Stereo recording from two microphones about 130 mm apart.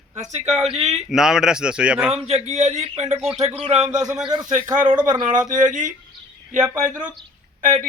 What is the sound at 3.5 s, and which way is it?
Speech, 45° right (ahead or behind).